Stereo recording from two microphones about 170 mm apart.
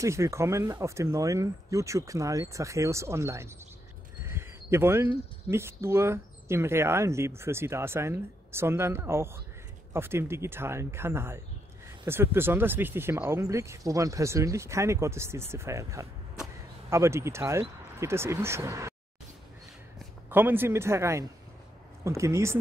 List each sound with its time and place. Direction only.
0.0 s speech: 15° right (ahead or behind)
20.2 s speech: 10° right (ahead or behind)